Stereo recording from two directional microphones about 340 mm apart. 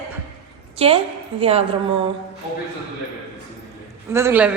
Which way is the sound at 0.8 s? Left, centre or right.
Centre.